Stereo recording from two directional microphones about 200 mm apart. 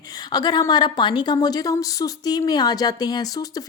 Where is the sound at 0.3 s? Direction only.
20° left (ahead or behind).